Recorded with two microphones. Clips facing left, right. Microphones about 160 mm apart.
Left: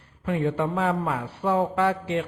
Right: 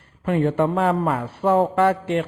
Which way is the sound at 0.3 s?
60° right (ahead or behind).